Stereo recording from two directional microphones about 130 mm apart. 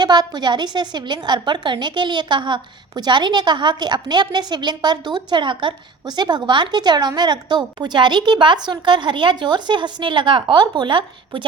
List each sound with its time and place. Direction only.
0.0 s a woman's voice: 35° right (ahead or behind)